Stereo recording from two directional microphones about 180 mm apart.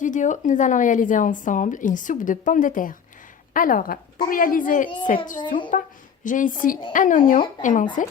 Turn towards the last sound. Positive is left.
turn(degrees=45)  # may be behind; listen again after turning